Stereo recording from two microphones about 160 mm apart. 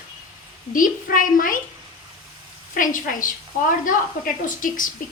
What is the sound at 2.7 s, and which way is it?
A woman's voice, 55° left (ahead or behind).